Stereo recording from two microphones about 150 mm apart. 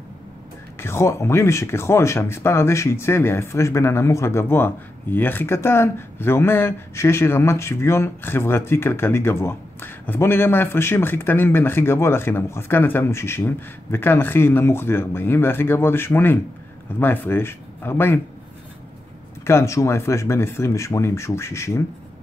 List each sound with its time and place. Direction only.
0.7 s speech: 15° left (ahead or behind)
19.4 s speech: 20° left (ahead or behind)